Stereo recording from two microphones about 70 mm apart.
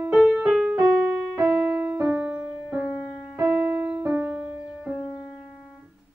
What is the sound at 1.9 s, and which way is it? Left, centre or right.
Music, centre.